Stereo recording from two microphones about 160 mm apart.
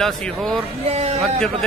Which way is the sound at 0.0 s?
Centre (ahead or behind).